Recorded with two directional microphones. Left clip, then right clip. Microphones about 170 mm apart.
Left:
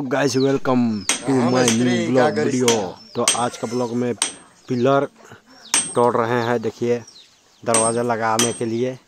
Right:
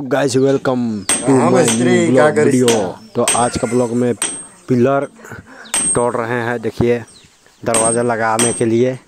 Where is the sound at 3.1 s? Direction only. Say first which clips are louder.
Right 5 dB; 30° right (ahead or behind).